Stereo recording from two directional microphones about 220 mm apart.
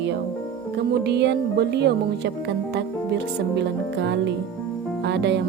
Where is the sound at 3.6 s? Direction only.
50° right (ahead or behind).